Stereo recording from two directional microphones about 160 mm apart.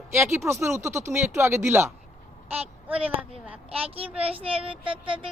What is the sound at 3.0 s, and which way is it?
Speech, 10° right (ahead or behind).